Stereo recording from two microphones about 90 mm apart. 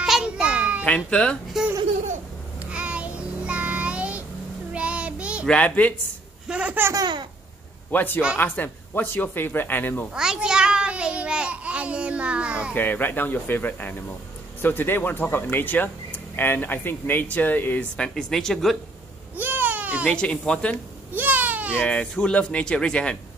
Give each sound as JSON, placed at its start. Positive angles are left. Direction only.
{"t": 0.0, "sound": "a sound", "side_deg": -5}
{"t": 0.8, "sound": "speech", "side_deg": 15}
{"t": 2.7, "sound": "child singing", "side_deg": -10}
{"t": 5.5, "sound": "speech", "side_deg": 15}
{"t": 6.4, "sound": "a man's voice", "side_deg": -10}
{"t": 6.8, "sound": "speech", "side_deg": -35}
{"t": 7.9, "sound": "speech", "side_deg": 20}
{"t": 10.1, "sound": "babbling", "side_deg": -10}
{"t": 12.7, "sound": "speech", "side_deg": 20}
{"t": 17.9, "sound": "speech", "side_deg": 5}
{"t": 19.3, "sound": "baby cry", "side_deg": -20}
{"t": 20.1, "sound": "speech", "side_deg": 10}
{"t": 21.1, "sound": "baby cry", "side_deg": -20}
{"t": 21.7, "sound": "speech", "side_deg": 15}